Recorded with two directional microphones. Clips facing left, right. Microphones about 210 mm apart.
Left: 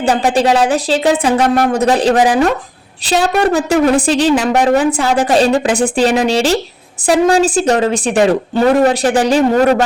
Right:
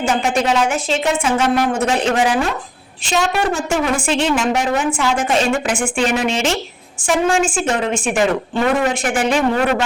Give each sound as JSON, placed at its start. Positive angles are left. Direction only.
{"t": 0.0, "sound": "a woman's voice", "side_deg": 35}